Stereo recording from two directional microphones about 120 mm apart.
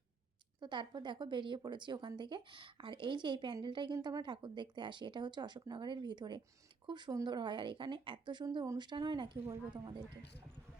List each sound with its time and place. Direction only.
0.6 s speech: 40° right (ahead or behind)
8.6 s speech: 30° right (ahead or behind)
8.9 s speech: 40° right (ahead or behind)